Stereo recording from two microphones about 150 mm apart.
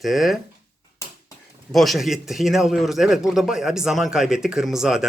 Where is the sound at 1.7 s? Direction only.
Centre (ahead or behind).